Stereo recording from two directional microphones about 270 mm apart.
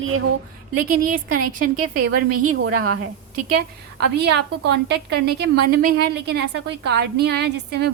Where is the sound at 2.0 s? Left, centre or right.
Right.